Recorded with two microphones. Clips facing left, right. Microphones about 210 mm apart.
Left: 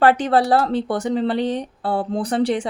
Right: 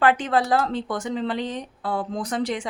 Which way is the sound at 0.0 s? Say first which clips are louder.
Left 4 dB; 35° left (ahead or behind).